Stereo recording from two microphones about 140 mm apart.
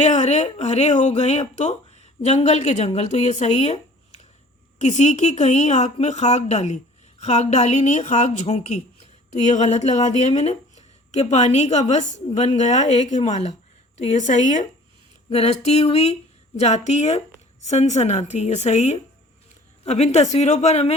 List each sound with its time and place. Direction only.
0.0 s a woman's voice: 55° left (ahead or behind)
15.3 s a woman's voice: 50° left (ahead or behind)